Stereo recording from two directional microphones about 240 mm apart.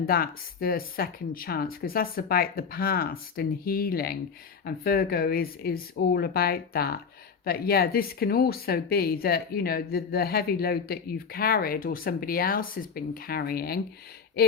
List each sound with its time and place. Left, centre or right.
0.0 s speech: left